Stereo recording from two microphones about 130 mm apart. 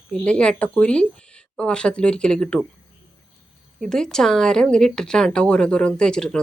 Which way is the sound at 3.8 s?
5° left (ahead or behind).